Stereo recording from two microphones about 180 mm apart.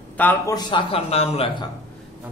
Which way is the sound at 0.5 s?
30° left (ahead or behind).